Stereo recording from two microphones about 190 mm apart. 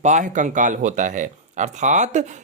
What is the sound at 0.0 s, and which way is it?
Speech, 40° right (ahead or behind).